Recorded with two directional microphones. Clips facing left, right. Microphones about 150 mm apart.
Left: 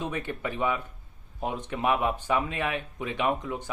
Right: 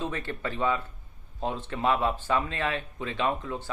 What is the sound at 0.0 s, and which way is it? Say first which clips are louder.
A man's voice: left 1 dB; 15° left (ahead or behind).